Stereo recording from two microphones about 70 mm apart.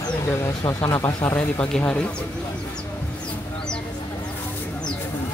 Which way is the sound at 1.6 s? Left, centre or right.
Centre.